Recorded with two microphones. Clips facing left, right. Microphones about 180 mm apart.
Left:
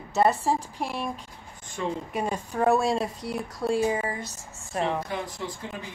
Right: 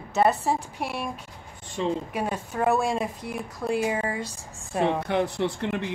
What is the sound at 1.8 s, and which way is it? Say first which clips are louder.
Speech: right 3 dB; 25° right (ahead or behind).